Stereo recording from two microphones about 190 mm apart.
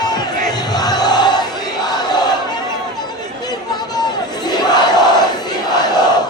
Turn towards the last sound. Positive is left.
turn(degrees=20)  # may be behind; listen again after turning